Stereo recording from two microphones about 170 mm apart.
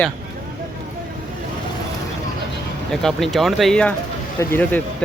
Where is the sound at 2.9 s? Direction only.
5° left (ahead or behind).